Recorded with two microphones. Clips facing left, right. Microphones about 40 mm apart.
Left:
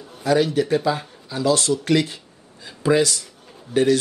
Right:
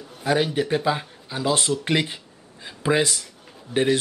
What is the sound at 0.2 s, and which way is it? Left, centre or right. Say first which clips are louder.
Speech: left 3 dB; right.